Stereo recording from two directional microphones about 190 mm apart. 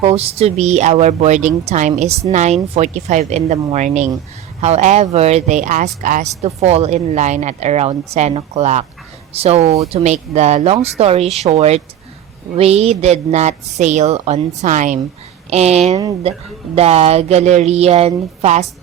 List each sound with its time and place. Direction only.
0.0 s speech: 35° right (ahead or behind)